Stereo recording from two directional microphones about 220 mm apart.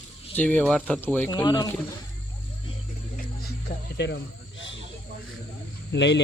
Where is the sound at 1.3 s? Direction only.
20° left (ahead or behind).